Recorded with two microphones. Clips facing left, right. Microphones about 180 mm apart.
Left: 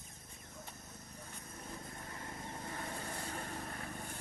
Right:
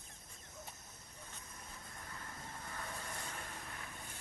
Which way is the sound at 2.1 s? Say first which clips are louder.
Left 3 dB; 25° left (ahead or behind).